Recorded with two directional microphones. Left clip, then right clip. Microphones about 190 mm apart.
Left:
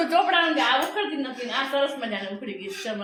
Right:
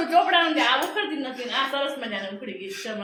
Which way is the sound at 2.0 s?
15° left (ahead or behind).